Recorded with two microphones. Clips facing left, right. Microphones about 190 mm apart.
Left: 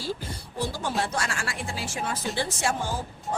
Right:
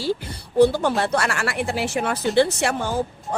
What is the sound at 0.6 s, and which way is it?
Speech, 65° right (ahead or behind).